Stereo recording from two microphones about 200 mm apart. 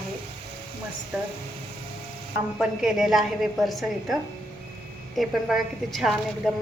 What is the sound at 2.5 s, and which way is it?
A woman's voice, centre (ahead or behind).